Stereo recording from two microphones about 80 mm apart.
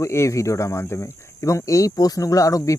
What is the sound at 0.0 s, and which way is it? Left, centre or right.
Speech, left.